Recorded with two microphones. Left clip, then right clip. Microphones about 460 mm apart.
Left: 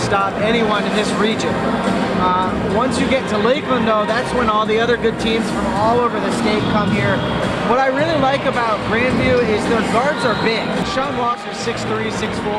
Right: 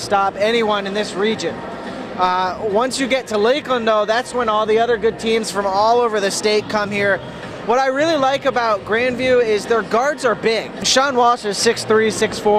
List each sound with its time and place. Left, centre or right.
0.1 s speech: right
2.2 s speech: right
7.7 s speech: right